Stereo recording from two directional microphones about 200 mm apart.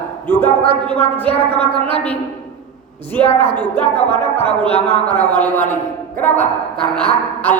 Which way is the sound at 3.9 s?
30° left (ahead or behind).